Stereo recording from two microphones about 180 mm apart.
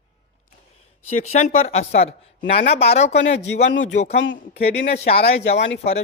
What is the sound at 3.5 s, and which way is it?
Speech, 80° left.